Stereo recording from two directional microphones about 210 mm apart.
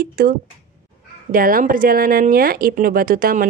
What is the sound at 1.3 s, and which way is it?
Speech, 40° right (ahead or behind).